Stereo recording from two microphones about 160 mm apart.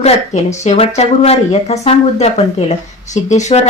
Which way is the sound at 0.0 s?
45° left (ahead or behind).